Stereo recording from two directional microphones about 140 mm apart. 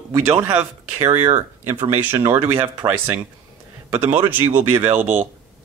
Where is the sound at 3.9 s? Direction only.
15° right (ahead or behind).